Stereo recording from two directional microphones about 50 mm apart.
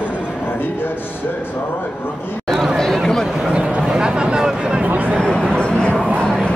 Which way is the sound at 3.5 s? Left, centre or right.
Right.